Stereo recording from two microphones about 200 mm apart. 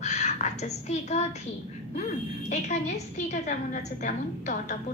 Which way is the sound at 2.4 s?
35° left (ahead or behind).